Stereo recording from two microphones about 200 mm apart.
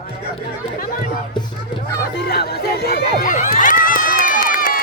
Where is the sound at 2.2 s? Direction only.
55° left (ahead or behind).